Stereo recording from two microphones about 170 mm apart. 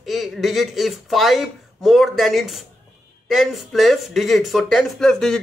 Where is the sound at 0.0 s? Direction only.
Centre (ahead or behind).